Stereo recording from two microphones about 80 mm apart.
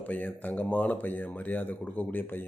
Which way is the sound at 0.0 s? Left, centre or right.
Left.